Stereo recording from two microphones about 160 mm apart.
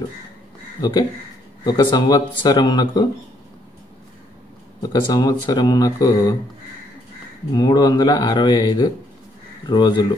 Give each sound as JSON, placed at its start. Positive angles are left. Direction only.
{"t": 0.7, "sound": "speech", "side_deg": 25}
{"t": 4.8, "sound": "speech", "side_deg": 20}
{"t": 7.5, "sound": "speech", "side_deg": 25}